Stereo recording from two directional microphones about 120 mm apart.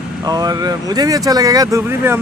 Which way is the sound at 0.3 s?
30° right (ahead or behind).